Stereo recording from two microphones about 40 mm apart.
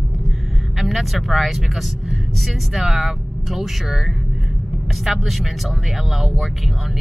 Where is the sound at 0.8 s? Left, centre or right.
Centre.